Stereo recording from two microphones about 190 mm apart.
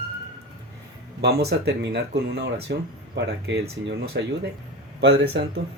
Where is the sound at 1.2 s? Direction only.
60° right (ahead or behind).